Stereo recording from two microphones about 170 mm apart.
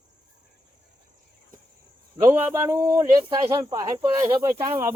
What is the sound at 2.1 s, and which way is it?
A man's voice, 15° right (ahead or behind).